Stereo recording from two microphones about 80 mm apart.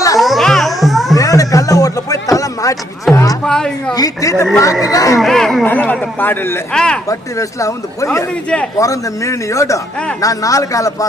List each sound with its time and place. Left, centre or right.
0.2 s music: centre
1.1 s a sound: left
3.1 s music: centre
3.4 s speech: centre
3.9 s speech: left
5.2 s speech: centre
5.6 s speech: left
6.7 s speech: centre
7.1 s speech: left